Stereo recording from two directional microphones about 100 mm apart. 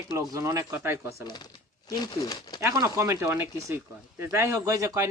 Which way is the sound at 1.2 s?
45° left (ahead or behind).